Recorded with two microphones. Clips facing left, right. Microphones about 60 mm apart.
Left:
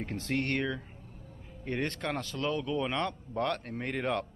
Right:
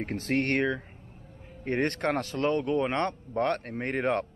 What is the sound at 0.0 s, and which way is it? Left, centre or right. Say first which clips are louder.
Speech: right 4 dB; right.